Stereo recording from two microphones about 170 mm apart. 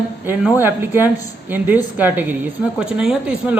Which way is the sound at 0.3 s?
10° right (ahead or behind).